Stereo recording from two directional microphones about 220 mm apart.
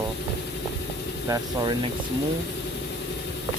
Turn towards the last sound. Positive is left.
turn(degrees=-20)  # may be behind; listen again after turning